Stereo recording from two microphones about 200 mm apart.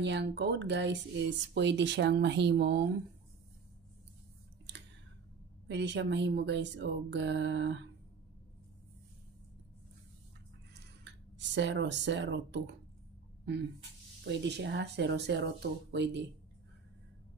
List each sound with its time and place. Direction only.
0.0 s speech: 60° right (ahead or behind)
5.7 s speech: 60° right (ahead or behind)
10.7 s speech: 60° right (ahead or behind)
14.2 s speech: 60° right (ahead or behind)